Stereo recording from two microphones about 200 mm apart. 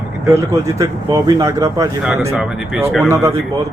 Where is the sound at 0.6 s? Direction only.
15° right (ahead or behind).